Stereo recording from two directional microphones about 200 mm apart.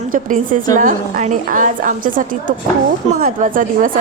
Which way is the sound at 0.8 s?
40° right (ahead or behind).